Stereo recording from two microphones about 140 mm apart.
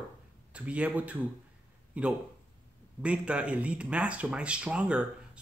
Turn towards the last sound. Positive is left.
turn(degrees=-10)  # may be behind; listen again after turning